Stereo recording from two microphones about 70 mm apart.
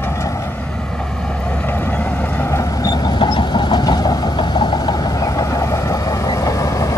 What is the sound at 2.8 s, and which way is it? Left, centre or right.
Vehicle, left.